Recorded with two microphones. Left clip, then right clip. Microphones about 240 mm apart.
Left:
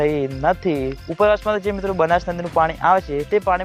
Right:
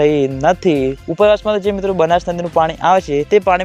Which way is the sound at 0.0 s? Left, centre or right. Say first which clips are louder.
Right 6 dB; right.